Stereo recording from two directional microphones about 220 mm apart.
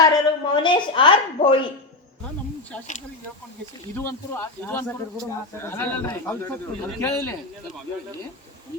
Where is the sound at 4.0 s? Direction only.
10° left (ahead or behind).